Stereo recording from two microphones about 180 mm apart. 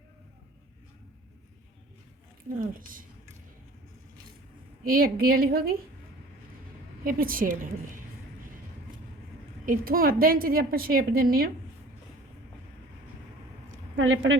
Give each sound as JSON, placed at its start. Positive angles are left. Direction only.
{"t": 2.6, "sound": "a woman's voice", "side_deg": -50}
{"t": 4.8, "sound": "a woman's voice", "side_deg": -55}
{"t": 7.0, "sound": "a woman's voice", "side_deg": -50}
{"t": 9.6, "sound": "a woman's voice", "side_deg": -50}
{"t": 13.7, "sound": "a sound", "side_deg": -90}